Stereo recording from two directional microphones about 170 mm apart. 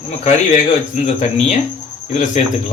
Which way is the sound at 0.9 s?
45° left (ahead or behind).